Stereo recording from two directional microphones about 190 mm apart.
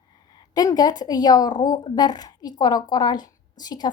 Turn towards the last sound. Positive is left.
turn(degrees=20)  # may be behind; listen again after turning